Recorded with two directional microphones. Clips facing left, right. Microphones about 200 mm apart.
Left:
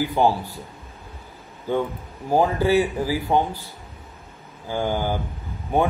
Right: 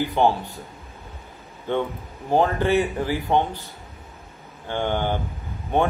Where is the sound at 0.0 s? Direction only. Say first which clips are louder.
Even; 10° left (ahead or behind).